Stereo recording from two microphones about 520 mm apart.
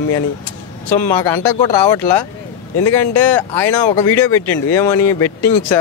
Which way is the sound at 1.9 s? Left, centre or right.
Left.